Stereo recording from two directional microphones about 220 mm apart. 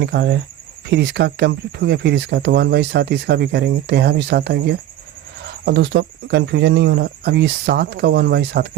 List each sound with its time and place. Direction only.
0.0 s speech: 50° right (ahead or behind)